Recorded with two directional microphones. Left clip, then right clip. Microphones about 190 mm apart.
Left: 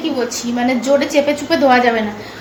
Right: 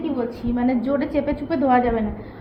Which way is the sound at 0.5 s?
10° left (ahead or behind).